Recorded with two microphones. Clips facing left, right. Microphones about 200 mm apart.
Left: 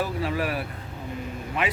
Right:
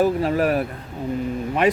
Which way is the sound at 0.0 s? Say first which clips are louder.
Right 8 dB; 45° right (ahead or behind).